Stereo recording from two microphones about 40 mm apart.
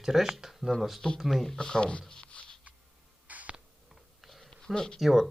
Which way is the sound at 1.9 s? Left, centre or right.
Left.